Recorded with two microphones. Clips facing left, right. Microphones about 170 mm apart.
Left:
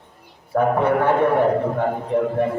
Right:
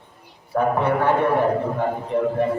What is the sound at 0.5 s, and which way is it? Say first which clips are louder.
A man's voice: left 2 dB; 55° left (ahead or behind).